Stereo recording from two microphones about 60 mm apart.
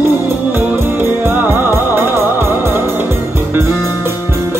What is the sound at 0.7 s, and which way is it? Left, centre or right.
Music, right.